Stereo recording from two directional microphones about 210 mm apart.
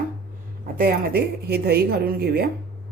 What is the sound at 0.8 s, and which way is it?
Speech, 45° right (ahead or behind).